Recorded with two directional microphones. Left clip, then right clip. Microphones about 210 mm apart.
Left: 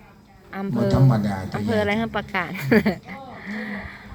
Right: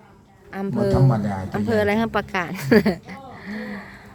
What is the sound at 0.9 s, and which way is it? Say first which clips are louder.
Speech: right 1 dB; 45° left (ahead or behind).